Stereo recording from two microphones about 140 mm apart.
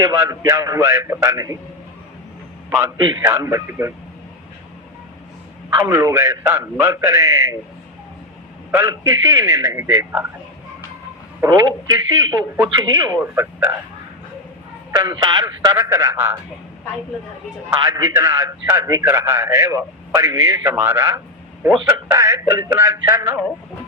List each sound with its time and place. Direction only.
0.0 s a man's voice: 25° right (ahead or behind)
3.0 s a man's voice: 30° right (ahead or behind)
3.3 s a man's voice: 15° right (ahead or behind)
5.7 s a man's voice: 20° right (ahead or behind)
8.7 s a man's voice: 20° right (ahead or behind)
11.4 s a man's voice: 25° right (ahead or behind)
13.2 s speech: 15° right (ahead or behind)
14.9 s a man's voice: 25° right (ahead or behind)
17.7 s a man's voice: 20° right (ahead or behind)